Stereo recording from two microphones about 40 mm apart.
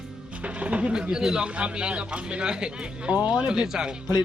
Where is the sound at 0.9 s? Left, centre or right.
Right.